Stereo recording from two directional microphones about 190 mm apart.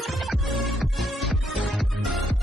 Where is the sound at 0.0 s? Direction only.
Centre (ahead or behind).